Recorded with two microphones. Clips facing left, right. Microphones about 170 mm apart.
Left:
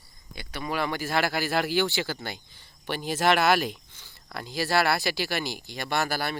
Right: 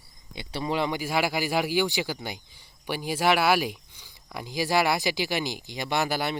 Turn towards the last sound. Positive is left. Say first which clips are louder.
# right 1 dB
turn(degrees=-15)  # may be behind; listen again after turning